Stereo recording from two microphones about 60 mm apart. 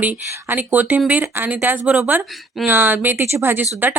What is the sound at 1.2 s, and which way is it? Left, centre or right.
Speech, right.